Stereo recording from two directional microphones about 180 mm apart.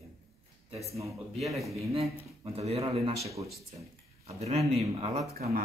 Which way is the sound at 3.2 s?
15° right (ahead or behind).